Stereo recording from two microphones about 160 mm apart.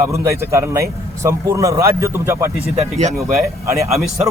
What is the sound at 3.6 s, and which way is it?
Speech, 20° right (ahead or behind).